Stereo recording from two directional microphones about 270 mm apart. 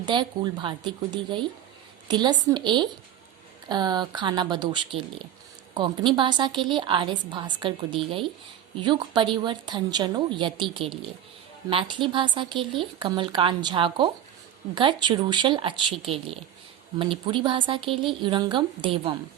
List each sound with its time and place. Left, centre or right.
0.0 s a woman's voice: centre